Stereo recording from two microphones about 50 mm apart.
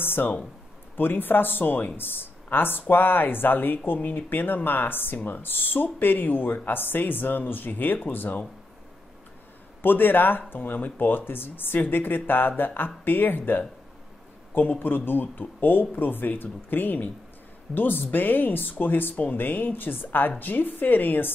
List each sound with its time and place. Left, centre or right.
0.0 s a sound: left
0.9 s speech: left
9.8 s speech: left